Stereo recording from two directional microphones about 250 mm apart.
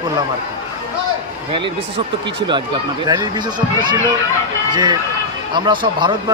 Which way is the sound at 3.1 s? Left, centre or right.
Centre.